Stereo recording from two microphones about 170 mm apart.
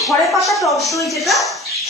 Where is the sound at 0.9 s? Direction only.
20° left (ahead or behind).